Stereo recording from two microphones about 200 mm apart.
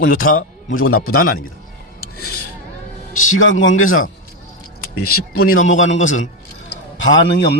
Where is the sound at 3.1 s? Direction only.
85° left.